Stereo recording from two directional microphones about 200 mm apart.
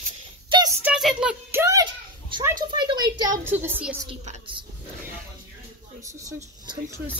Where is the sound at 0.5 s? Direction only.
20° right (ahead or behind).